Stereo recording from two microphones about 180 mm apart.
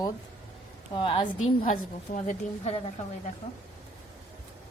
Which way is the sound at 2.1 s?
40° left (ahead or behind).